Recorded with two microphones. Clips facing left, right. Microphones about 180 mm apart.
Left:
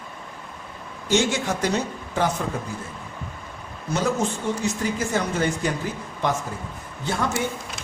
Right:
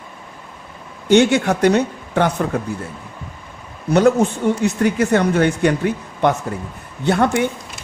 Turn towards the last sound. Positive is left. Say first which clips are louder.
# right 9 dB
turn(degrees=-65)  # may be behind; listen again after turning